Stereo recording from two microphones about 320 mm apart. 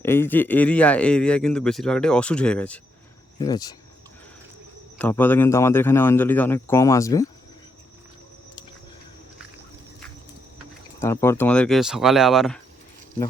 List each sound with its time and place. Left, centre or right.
0.0 s speech: centre
4.9 s speech: centre
11.0 s speech: centre